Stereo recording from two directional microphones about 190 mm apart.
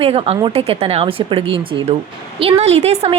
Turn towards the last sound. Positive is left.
turn(degrees=-35)  # may be behind; listen again after turning